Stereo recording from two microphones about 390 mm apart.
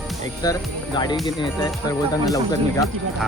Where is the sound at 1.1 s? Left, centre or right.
Centre.